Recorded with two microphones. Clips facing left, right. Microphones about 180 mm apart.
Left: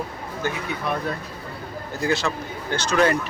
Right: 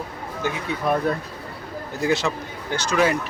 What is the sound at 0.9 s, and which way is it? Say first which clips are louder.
Speech: right 5 dB; 45° right (ahead or behind).